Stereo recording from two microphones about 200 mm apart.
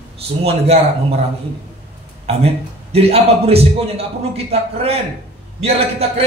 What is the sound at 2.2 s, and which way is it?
A man's voice, 30° right (ahead or behind).